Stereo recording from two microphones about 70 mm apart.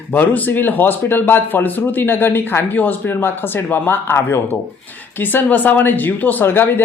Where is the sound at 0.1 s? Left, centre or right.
Left.